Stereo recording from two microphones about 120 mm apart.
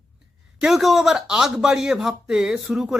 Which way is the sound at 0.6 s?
Centre (ahead or behind).